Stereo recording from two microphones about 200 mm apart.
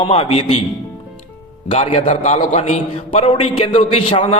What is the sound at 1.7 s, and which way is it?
A man's voice, 30° left (ahead or behind).